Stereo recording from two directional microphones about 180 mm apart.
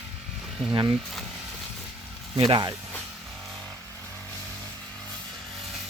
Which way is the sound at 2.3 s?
30° right (ahead or behind).